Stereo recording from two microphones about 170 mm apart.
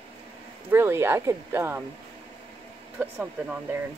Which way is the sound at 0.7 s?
15° right (ahead or behind).